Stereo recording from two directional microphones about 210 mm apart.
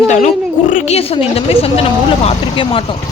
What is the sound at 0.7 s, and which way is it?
A woman's voice, 30° left (ahead or behind).